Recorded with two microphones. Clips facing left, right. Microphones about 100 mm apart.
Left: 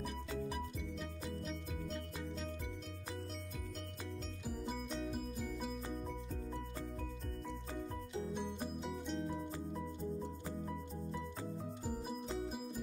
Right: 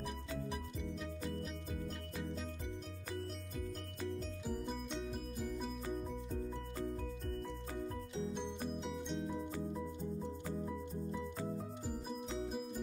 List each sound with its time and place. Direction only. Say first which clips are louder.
4.5 s music: even; centre (ahead or behind)
8.8 s music: even; centre (ahead or behind)
12.3 s music: right 2 dB; centre (ahead or behind)